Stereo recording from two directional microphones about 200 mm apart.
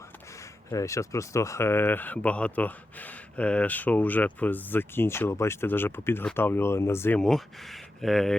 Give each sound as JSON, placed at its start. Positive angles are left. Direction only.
{"t": 0.7, "sound": "speech", "side_deg": 15}